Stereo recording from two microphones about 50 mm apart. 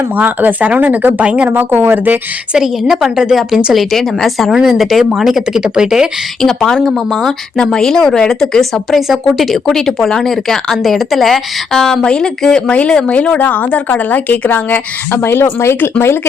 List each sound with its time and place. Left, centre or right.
0.2 s speech: right
1.5 s speech: right
2.6 s speech: centre
3.8 s speech: centre
6.4 s speech: centre
8.9 s speech: centre
12.0 s speech: centre
13.4 s speech: left
15.1 s speech: left